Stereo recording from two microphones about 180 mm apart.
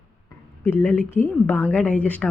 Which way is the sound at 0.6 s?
10° left (ahead or behind).